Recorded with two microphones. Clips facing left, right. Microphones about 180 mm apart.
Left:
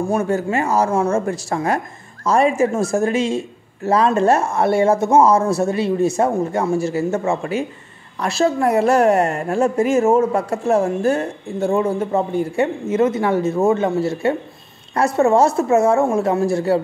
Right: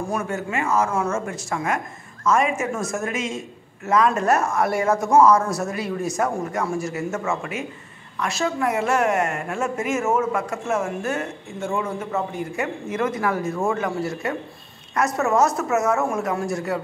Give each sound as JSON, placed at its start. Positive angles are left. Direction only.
{"t": 0.1, "sound": "a woman's voice", "side_deg": 35}